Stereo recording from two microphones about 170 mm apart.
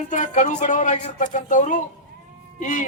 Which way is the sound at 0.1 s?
50° left (ahead or behind).